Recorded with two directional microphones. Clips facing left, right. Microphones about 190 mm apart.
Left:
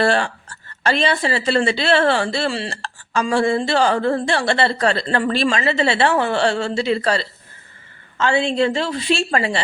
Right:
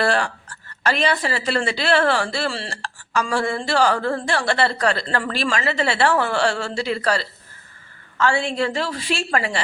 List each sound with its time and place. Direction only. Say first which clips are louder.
0.0 s speech: left 3 dB; 25° left (ahead or behind)